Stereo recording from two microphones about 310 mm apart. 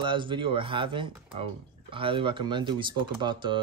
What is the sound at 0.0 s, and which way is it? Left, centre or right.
Speech, centre.